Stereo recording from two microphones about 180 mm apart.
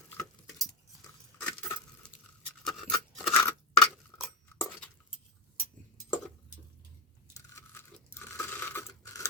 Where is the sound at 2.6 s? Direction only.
Centre (ahead or behind).